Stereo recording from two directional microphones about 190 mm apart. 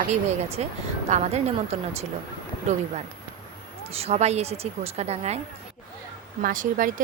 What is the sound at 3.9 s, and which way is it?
Speech, 35° right (ahead or behind).